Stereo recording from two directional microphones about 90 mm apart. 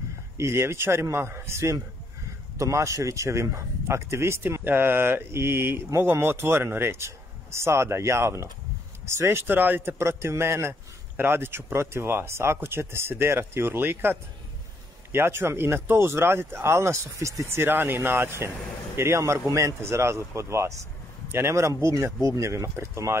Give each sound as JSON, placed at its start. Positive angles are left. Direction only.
{"t": 0.4, "sound": "a man's voice", "side_deg": -30}
{"t": 15.1, "sound": "a man's voice", "side_deg": -25}